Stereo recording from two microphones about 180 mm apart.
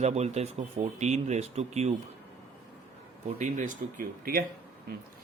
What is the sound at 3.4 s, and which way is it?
Speech, 45° right (ahead or behind).